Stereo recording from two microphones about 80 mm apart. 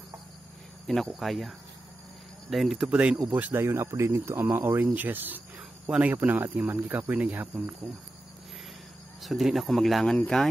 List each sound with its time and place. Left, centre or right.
0.8 s speech: centre
2.5 s speech: centre
3.3 s speech: right
9.2 s speech: centre